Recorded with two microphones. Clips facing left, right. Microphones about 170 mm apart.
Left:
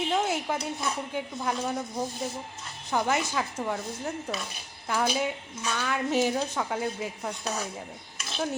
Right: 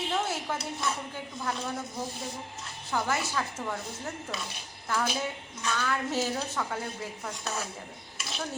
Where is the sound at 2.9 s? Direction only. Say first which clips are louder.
Left 3 dB; 20° left (ahead or behind).